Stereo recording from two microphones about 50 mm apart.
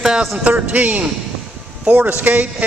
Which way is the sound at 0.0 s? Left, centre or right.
Centre.